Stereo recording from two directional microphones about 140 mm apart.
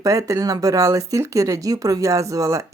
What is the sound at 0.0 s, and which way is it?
Speech, 25° right (ahead or behind).